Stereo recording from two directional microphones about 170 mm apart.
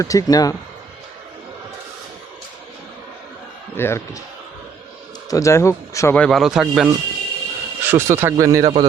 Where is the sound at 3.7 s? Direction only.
15° left (ahead or behind).